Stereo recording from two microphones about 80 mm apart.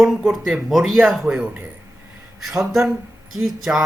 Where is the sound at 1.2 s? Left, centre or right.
Centre.